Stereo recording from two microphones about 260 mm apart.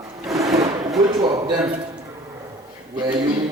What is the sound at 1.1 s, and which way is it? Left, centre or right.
Speech, centre.